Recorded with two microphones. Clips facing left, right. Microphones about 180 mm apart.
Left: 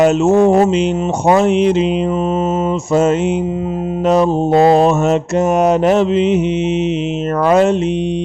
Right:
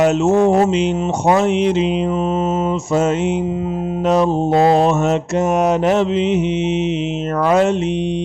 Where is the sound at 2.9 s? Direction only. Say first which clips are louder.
Left 4 dB; 45° left (ahead or behind).